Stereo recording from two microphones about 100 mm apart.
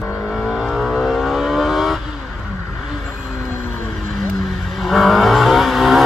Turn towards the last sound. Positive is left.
turn(degrees=0)  # may be behind; listen again after turning